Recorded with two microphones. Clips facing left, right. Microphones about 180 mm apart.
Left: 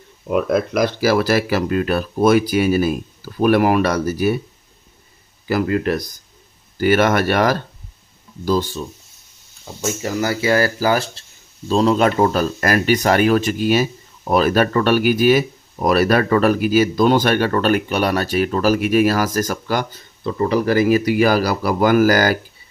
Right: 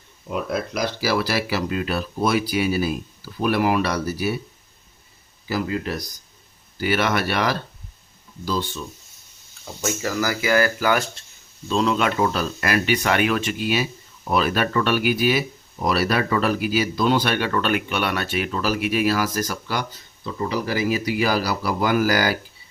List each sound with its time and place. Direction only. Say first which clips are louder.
0.3 s speech: left 8 dB; 60° left (ahead or behind)
5.5 s speech: left 7 dB; 60° left (ahead or behind)
6.7 s speech: left 7 dB; 50° left (ahead or behind)
9.8 s speech: left 3 dB; 20° left (ahead or behind); by 22.4 s 50° left (ahead or behind)